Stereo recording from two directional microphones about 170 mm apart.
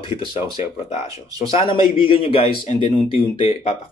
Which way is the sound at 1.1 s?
20° right (ahead or behind).